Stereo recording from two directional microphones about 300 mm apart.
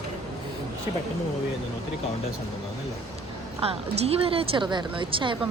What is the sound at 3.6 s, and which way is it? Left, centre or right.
A woman's voice, centre.